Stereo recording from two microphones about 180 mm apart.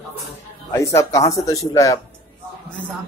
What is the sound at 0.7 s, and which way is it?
Speech, 15° left (ahead or behind).